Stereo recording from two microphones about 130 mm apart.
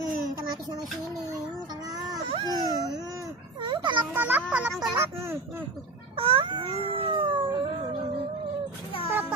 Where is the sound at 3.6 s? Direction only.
40° right (ahead or behind).